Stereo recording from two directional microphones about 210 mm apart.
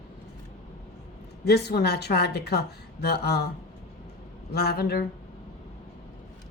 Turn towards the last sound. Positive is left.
turn(degrees=50)  # may be behind; listen again after turning